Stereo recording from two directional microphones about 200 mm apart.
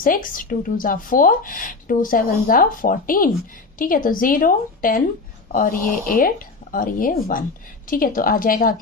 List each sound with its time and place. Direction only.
0.0 s speech: 45° left (ahead or behind)